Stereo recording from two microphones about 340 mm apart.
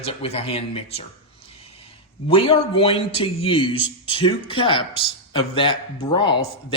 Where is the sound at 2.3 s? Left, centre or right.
Centre.